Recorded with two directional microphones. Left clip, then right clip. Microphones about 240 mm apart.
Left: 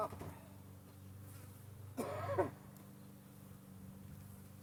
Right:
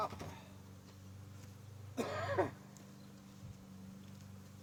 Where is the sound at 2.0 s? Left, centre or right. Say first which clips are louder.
Right 2 dB; centre.